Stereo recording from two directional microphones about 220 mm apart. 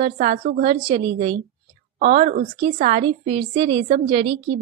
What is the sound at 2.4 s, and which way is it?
Speech, 20° right (ahead or behind).